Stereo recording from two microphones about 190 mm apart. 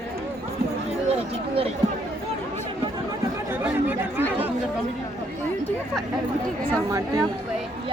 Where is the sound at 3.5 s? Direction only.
10° right (ahead or behind).